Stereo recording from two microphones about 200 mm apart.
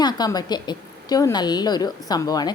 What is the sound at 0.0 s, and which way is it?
A woman's voice, 20° left (ahead or behind).